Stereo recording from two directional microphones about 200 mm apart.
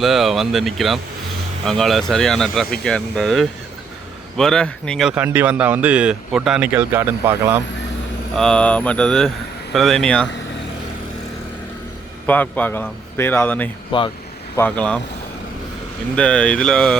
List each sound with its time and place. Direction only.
0.0 s speech: centre (ahead or behind)
8.4 s speech: 5° left (ahead or behind)
12.2 s a man's voice: 10° left (ahead or behind)
13.9 s speech: 25° left (ahead or behind)
14.5 s a man's voice: 10° left (ahead or behind)
16.1 s speech: 5° left (ahead or behind)